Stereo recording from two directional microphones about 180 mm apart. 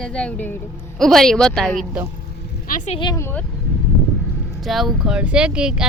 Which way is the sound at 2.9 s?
25° left (ahead or behind).